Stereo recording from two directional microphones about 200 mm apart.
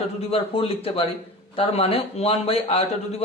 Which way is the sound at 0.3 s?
30° left (ahead or behind).